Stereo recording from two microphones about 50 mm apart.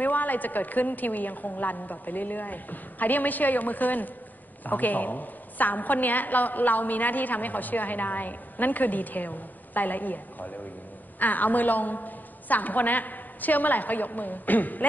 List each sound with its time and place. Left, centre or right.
0.0 s a woman's voice: left